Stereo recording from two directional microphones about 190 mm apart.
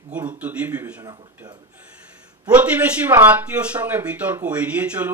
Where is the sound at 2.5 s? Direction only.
10° right (ahead or behind).